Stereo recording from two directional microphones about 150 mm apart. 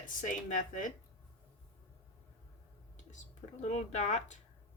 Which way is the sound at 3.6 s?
50° left (ahead or behind).